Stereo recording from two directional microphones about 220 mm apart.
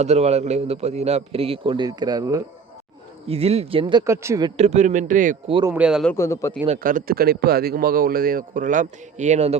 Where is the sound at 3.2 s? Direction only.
25° right (ahead or behind).